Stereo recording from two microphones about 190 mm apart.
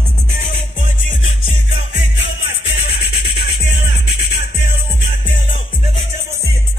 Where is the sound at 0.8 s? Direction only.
80° left.